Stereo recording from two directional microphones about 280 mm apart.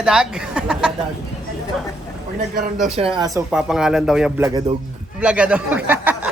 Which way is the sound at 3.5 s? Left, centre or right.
Centre.